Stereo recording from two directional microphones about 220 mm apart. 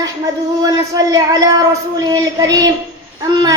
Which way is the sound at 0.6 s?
15° right (ahead or behind).